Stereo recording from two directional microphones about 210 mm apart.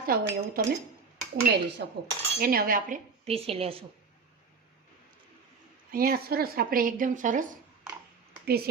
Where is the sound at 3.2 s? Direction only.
30° right (ahead or behind).